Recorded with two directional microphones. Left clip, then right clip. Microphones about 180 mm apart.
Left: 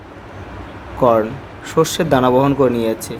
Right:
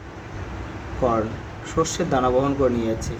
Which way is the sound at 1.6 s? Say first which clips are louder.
Left 7 dB; 60° left (ahead or behind).